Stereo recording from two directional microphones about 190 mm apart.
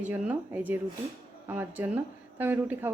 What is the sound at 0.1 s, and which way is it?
A woman's voice, 10° right (ahead or behind).